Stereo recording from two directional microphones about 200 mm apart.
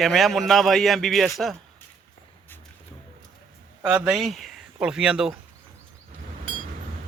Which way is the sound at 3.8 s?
5° right (ahead or behind).